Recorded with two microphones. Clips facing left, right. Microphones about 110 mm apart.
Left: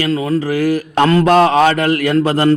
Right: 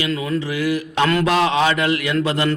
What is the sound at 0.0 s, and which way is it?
A man's voice, 35° left (ahead or behind).